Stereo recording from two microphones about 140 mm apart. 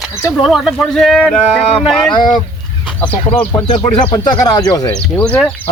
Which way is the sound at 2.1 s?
30° left (ahead or behind).